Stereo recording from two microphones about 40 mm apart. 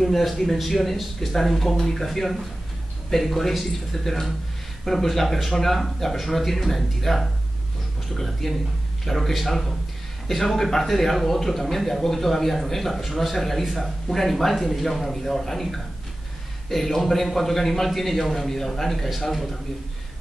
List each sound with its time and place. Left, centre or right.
0.0 s speech: centre